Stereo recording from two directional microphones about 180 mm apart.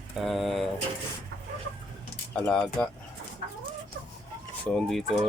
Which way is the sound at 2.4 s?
5° left (ahead or behind).